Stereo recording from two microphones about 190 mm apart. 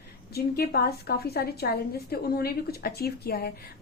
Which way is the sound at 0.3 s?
55° left (ahead or behind).